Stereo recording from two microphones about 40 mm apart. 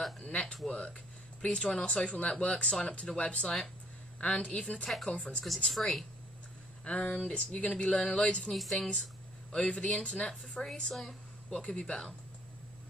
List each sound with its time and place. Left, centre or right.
0.2 s speech: left
5.7 s speech: centre
6.8 s speech: left
7.7 s speech: centre
8.5 s speech: centre
8.7 s speech: centre
10.9 s speech: centre
11.5 s speech: centre